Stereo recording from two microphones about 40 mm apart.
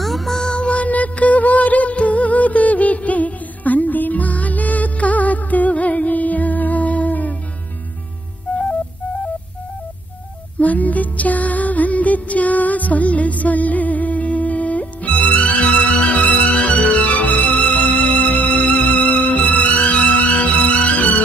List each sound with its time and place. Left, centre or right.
0.0 s music: centre
0.6 s music: left
8.5 s music: left
10.6 s music: left
16.2 s music: left